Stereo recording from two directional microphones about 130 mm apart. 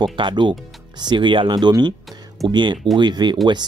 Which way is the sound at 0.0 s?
40° right (ahead or behind).